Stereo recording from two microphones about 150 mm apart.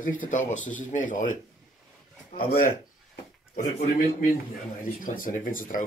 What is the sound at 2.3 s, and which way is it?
Speech, 75° left (ahead or behind).